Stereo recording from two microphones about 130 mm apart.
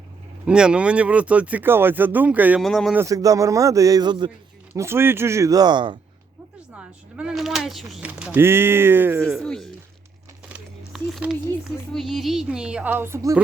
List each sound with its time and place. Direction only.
0.4 s speech: 5° right (ahead or behind)
2.6 s speech: centre (ahead or behind)
2.9 s speech: 25° right (ahead or behind)
4.7 s speech: 20° right (ahead or behind); by 6.0 s 35° right (ahead or behind)
6.7 s speech: 5° right (ahead or behind)
8.0 s speech: 10° right (ahead or behind)
9.2 s speech: centre (ahead or behind)
10.5 s a sound: 5° right (ahead or behind)
11.9 s speech: centre (ahead or behind); by 13.3 s 20° right (ahead or behind)